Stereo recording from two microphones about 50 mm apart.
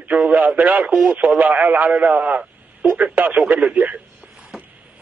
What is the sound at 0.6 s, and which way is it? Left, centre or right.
Speech, right.